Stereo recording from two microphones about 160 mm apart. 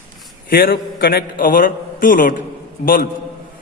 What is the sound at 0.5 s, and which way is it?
A man's voice, 65° left (ahead or behind).